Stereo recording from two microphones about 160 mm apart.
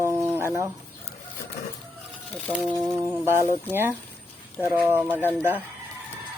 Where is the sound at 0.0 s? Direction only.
15° right (ahead or behind).